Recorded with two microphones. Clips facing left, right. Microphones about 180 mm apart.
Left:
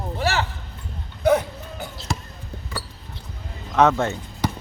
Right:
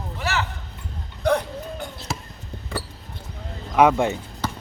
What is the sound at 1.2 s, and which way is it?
Basketball bounce, 5° left (ahead or behind).